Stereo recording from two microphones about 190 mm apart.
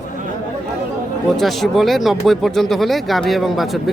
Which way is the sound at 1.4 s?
Centre (ahead or behind).